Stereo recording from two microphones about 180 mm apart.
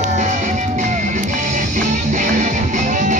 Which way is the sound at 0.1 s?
40° right (ahead or behind).